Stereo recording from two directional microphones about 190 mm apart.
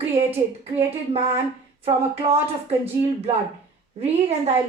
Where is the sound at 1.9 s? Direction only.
30° right (ahead or behind).